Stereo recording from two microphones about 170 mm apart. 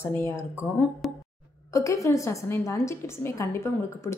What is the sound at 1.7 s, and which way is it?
A woman's voice, 20° left (ahead or behind).